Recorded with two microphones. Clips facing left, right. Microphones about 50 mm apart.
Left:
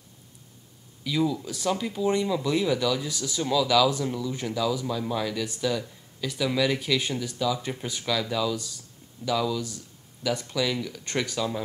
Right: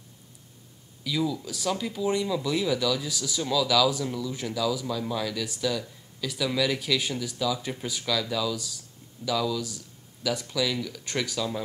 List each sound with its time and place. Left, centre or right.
1.0 s speech: centre